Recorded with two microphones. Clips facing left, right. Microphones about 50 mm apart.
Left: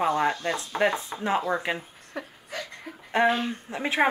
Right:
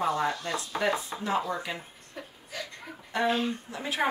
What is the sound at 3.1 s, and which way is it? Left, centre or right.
Speech, left.